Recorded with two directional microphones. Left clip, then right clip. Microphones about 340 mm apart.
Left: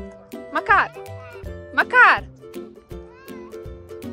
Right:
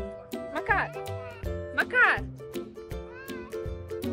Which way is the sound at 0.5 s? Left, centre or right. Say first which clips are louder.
Left 10 dB; left.